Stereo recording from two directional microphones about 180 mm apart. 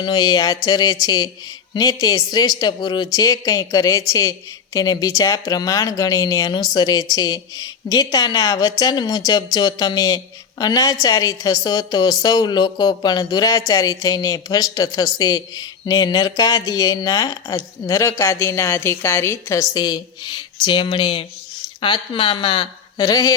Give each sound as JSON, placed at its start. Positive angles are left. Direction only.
{"t": 0.0, "sound": "a woman's voice", "side_deg": 25}